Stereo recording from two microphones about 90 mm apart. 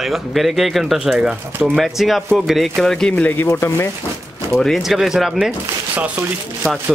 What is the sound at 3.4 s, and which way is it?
Speech, 30° left (ahead or behind).